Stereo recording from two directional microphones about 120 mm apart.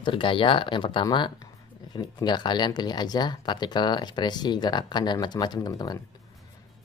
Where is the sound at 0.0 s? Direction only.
45° left (ahead or behind).